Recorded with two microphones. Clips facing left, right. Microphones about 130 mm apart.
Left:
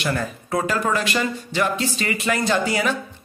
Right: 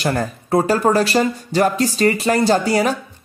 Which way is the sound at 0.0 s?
40° right (ahead or behind).